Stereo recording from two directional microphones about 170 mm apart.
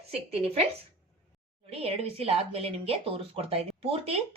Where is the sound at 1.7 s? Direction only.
35° right (ahead or behind).